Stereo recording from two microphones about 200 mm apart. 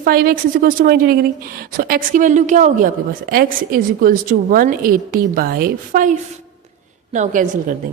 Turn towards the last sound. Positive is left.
turn(degrees=-40)  # may be behind; listen again after turning